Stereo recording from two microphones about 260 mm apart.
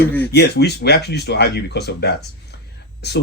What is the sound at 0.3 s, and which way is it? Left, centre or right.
Speech, left.